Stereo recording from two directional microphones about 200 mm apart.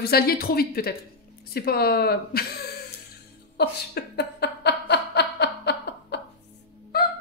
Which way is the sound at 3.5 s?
55° left (ahead or behind).